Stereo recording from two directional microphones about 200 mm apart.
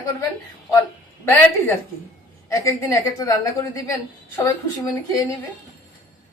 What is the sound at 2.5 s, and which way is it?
A woman's voice, 15° left (ahead or behind).